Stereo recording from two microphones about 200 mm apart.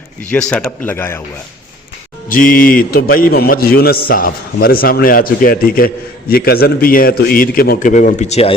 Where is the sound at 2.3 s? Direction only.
45° left (ahead or behind).